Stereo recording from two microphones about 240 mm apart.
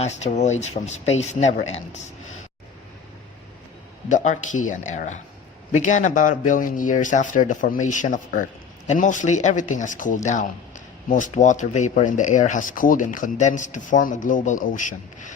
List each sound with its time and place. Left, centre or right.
0.0 s speech: left
4.1 s speech: left